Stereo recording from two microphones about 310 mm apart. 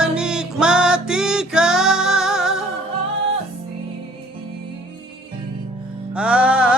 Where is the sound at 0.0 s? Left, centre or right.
Centre.